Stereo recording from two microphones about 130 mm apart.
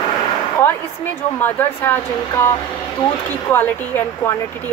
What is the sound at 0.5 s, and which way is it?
Speech, 15° left (ahead or behind).